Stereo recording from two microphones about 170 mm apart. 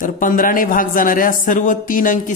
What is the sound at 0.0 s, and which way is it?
Speech, 55° left (ahead or behind).